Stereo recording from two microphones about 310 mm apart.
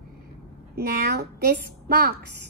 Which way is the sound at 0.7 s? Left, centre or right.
Right.